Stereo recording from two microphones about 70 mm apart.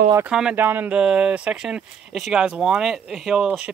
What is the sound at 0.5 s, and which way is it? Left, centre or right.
Speech, right.